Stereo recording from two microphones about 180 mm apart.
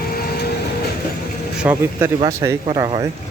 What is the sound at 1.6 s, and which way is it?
Speech, 10° right (ahead or behind).